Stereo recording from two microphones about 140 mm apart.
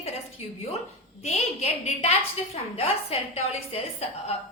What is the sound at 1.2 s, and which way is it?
A woman's voice, 50° left (ahead or behind).